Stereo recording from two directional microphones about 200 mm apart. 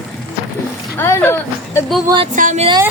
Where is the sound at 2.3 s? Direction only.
40° right (ahead or behind).